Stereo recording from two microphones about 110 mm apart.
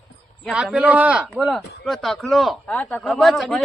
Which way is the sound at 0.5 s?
10° right (ahead or behind).